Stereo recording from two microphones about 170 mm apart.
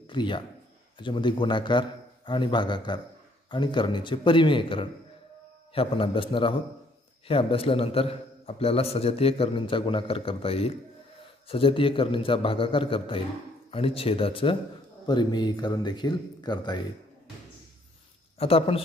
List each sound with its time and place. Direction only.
0.0 s a sound: 30° left (ahead or behind)
0.9 s a man's voice: 30° left (ahead or behind)
18.4 s a man's voice: 35° left (ahead or behind)